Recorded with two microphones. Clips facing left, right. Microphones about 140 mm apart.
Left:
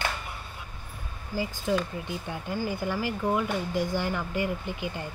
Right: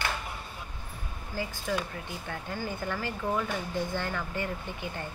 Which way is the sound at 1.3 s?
10° left (ahead or behind).